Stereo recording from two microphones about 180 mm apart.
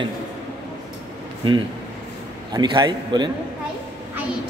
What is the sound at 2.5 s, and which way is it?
Speech, 25° right (ahead or behind).